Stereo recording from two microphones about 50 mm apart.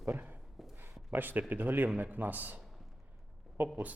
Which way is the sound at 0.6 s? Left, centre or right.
Centre.